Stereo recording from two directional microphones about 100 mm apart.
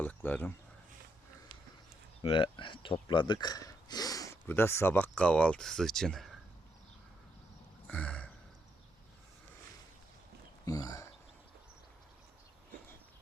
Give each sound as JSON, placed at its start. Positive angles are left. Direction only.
{"t": 0.0, "sound": "a sound", "side_deg": 20}
{"t": 2.2, "sound": "speech", "side_deg": 55}
{"t": 4.4, "sound": "speech", "side_deg": 25}
{"t": 4.9, "sound": "speech", "side_deg": 15}
{"t": 7.9, "sound": "a sound", "side_deg": 10}
{"t": 10.7, "sound": "speech", "side_deg": 35}